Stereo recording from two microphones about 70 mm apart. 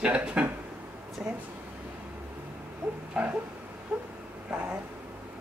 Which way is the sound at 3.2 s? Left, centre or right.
Centre.